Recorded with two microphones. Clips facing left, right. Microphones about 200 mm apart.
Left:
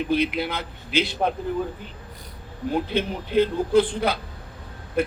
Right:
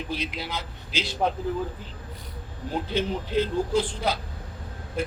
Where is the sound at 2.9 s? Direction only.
60° left (ahead or behind).